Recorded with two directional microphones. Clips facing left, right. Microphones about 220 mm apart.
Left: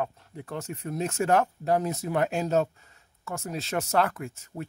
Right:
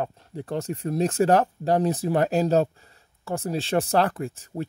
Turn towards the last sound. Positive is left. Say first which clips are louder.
# right 6 dB
turn(degrees=-35)  # may be behind; listen again after turning